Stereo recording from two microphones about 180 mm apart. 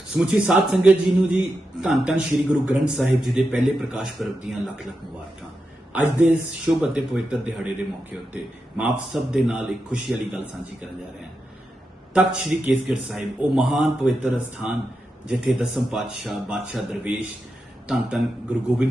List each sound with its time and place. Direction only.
0.2 s a man's voice: 5° right (ahead or behind)
5.9 s speech: 10° right (ahead or behind)
8.8 s a man's voice: 5° right (ahead or behind)
12.1 s a man's voice: 5° right (ahead or behind)